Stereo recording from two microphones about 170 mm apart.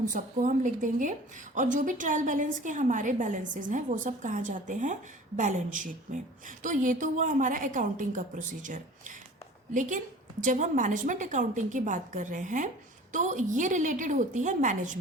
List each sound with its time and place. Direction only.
0.0 s a woman's voice: 50° right (ahead or behind)